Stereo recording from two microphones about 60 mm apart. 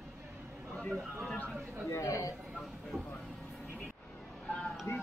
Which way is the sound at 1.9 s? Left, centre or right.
Left.